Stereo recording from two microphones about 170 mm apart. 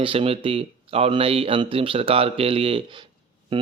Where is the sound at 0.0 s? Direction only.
30° right (ahead or behind).